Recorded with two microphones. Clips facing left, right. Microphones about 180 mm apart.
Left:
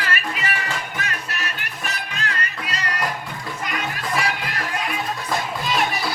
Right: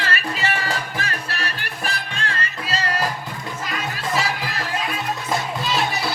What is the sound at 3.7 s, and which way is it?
Crowd, 25° right (ahead or behind).